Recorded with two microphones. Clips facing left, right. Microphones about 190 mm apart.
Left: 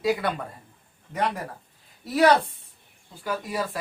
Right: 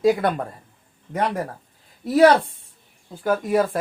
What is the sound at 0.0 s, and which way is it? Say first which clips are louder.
Speech: right 6 dB; 50° right (ahead or behind).